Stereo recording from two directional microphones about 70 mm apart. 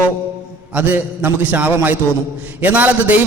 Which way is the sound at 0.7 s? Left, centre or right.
Right.